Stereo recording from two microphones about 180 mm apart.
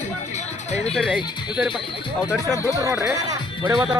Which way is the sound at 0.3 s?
35° left (ahead or behind).